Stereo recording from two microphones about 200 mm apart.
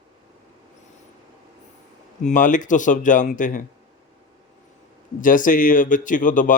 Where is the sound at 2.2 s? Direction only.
40° left (ahead or behind).